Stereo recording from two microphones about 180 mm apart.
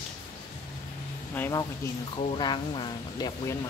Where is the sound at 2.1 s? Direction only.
25° left (ahead or behind).